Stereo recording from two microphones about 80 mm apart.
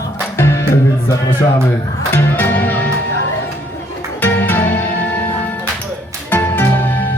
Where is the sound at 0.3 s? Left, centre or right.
Left.